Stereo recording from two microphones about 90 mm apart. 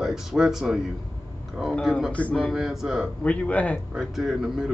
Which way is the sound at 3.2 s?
15° left (ahead or behind).